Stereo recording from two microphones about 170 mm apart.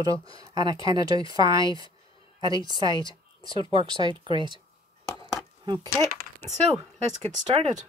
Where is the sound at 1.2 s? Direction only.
30° left (ahead or behind).